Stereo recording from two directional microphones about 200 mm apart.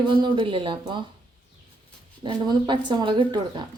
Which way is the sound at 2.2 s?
20° right (ahead or behind).